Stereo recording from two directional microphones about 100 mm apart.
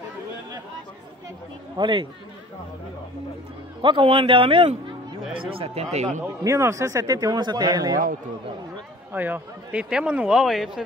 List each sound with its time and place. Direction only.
1.8 s a man's voice: 55° right (ahead or behind)
3.8 s a man's voice: 55° right (ahead or behind); by 6.0 s 90° right
6.4 s speech: 30° right (ahead or behind)
9.1 s a man's voice: 20° right (ahead or behind)